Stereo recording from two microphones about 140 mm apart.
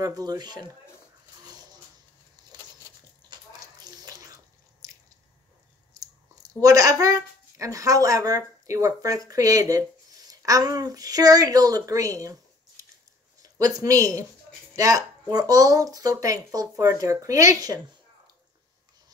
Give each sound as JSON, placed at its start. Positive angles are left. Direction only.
{"t": 0.0, "sound": "speech", "side_deg": -25}
{"t": 1.4, "sound": "dog", "side_deg": -30}
{"t": 3.3, "sound": "bathtub", "side_deg": -30}
{"t": 5.9, "sound": "speech", "side_deg": -25}